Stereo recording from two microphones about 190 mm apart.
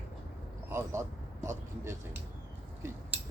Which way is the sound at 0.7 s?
15° right (ahead or behind).